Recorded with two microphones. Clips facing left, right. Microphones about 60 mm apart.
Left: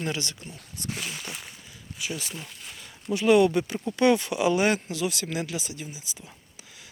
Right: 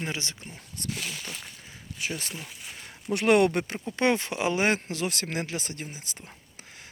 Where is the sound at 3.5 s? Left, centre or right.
Right.